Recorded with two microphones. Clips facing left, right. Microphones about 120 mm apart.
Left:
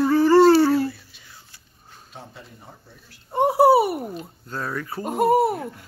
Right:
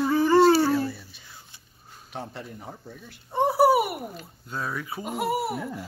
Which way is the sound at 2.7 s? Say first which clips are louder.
Right 6 dB; 55° right (ahead or behind).